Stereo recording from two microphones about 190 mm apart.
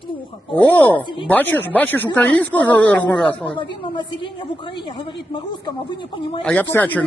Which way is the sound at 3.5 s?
25° left (ahead or behind).